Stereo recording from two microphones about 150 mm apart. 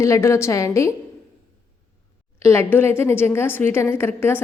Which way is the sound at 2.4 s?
15° left (ahead or behind).